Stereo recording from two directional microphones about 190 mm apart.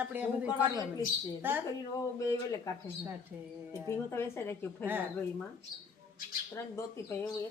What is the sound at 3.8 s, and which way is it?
Speech, 15° left (ahead or behind).